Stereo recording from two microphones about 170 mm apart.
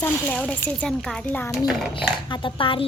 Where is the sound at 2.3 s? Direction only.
30° left (ahead or behind).